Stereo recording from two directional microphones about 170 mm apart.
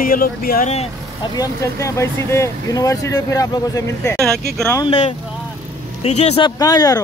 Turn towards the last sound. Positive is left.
turn(degrees=20)  # may be behind; listen again after turning